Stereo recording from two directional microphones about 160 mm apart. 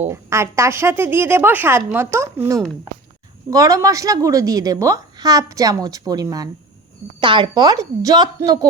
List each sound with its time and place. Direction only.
0.1 s a woman's voice: 15° right (ahead or behind)